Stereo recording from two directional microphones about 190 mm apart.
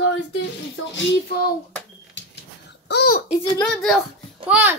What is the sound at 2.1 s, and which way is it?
Babbling, 65° left (ahead or behind).